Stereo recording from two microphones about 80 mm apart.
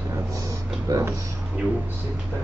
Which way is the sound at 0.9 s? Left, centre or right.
Right.